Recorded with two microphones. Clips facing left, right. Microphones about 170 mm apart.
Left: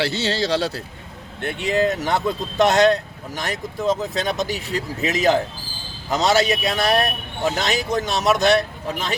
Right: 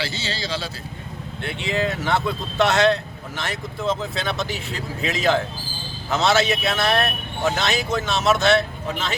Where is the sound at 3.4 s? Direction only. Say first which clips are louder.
Left 3 dB; 40° left (ahead or behind).